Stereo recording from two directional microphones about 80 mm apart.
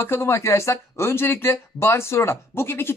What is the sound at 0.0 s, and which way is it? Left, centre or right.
Speech, left.